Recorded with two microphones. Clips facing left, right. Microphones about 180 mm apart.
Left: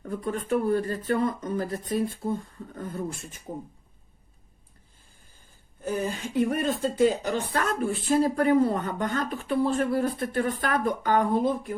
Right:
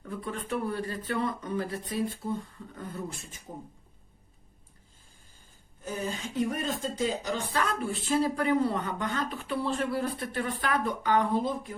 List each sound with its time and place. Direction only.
0.0 s speech: 40° left (ahead or behind)
6.3 s speech: 55° left (ahead or behind)